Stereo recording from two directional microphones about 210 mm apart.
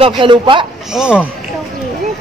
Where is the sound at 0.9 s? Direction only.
5° right (ahead or behind).